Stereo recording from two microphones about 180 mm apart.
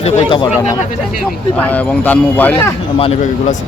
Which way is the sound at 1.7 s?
10° left (ahead or behind).